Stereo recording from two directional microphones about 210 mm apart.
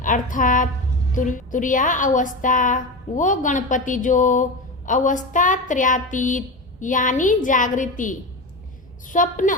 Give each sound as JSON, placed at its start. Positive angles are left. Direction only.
{"t": 0.0, "sound": "a woman's voice", "side_deg": 40}